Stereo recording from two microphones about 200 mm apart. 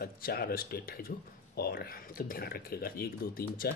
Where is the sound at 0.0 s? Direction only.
50° left (ahead or behind).